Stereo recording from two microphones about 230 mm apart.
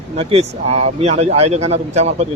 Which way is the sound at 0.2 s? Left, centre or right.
Right.